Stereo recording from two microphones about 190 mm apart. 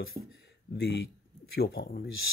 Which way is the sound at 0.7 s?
60° left (ahead or behind).